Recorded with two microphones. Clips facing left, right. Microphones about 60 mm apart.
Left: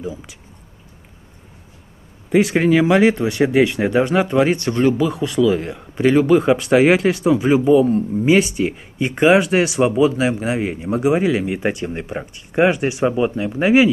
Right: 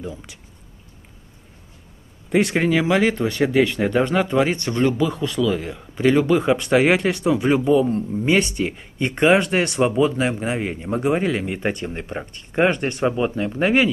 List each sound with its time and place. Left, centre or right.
0.0 s speech: centre
2.2 s speech: centre